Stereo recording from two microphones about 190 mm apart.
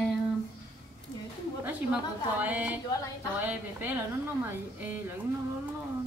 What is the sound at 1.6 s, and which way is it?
A woman's voice, 10° right (ahead or behind).